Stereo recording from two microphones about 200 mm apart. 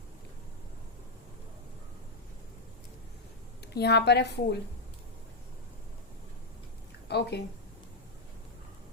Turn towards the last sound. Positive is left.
turn(degrees=55)  # may be behind; listen again after turning